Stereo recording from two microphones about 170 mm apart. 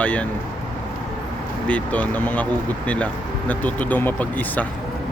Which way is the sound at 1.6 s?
10° left (ahead or behind).